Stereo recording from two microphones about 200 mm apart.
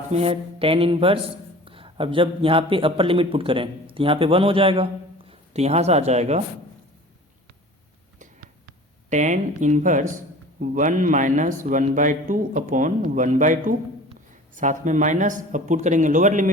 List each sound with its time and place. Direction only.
0.1 s speech: 30° right (ahead or behind)
8.2 s a sound: 40° right (ahead or behind)
10.6 s a man's voice: 40° right (ahead or behind)